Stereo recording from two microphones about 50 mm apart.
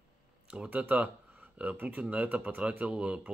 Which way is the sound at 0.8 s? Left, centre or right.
Right.